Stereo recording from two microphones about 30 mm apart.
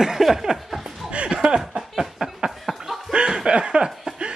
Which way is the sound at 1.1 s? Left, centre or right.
Right.